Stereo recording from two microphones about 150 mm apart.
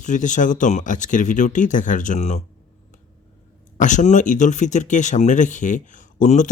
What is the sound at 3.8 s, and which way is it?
Speech, 55° left (ahead or behind).